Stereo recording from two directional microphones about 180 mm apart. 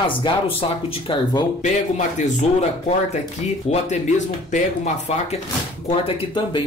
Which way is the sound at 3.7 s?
35° left (ahead or behind).